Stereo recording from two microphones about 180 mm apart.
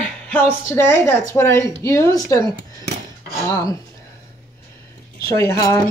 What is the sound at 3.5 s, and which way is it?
Speech, 20° left (ahead or behind).